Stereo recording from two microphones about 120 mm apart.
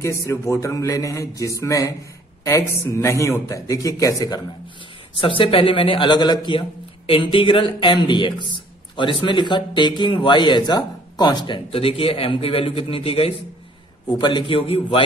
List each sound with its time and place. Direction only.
0.3 s a man's voice: 25° left (ahead or behind)
5.4 s a man's voice: 45° left (ahead or behind)
14.0 s a man's voice: 40° left (ahead or behind)